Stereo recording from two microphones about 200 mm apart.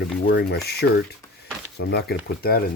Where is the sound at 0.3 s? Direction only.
55° left (ahead or behind).